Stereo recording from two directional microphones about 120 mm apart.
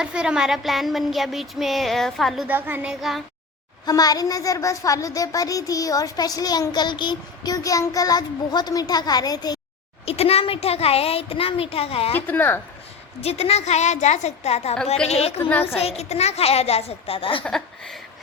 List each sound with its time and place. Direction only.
0.0 s a sound: 5° right (ahead or behind)
2.5 s a child's voice: 15° right (ahead or behind)
2.9 s a sound: centre (ahead or behind)
3.8 s a child's voice: 30° left (ahead or behind)
10.1 s a child's voice: 55° left (ahead or behind)
12.1 s a woman's voice: 15° left (ahead or behind)
13.2 s a child's voice: 60° left (ahead or behind)
15.4 s a woman's voice: 15° left (ahead or behind)
15.6 s a child's voice: 60° left (ahead or behind)
17.4 s a sound: 5° left (ahead or behind)